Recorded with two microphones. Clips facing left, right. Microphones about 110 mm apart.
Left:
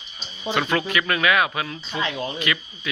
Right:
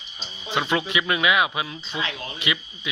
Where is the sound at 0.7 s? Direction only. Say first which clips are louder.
Left 1 dB; 15° right (ahead or behind).